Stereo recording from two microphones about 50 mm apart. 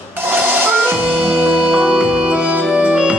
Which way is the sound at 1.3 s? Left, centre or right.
Right.